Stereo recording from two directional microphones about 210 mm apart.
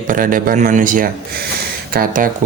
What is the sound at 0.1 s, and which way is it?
A man's voice, 40° right (ahead or behind).